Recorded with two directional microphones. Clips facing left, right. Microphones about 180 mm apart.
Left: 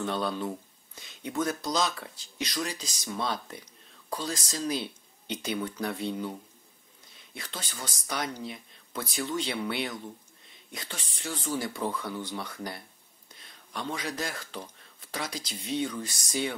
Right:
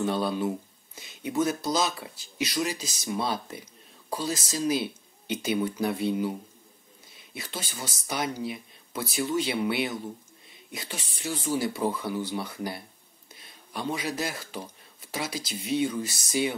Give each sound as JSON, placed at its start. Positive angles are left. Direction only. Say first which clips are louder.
{"t": 0.0, "sound": "speech", "louder": "right 4 dB", "side_deg": -5}
{"t": 7.3, "sound": "speech", "louder": "right 3 dB", "side_deg": -5}